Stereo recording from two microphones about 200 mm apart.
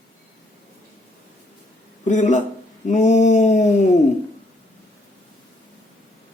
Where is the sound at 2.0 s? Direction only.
35° left (ahead or behind).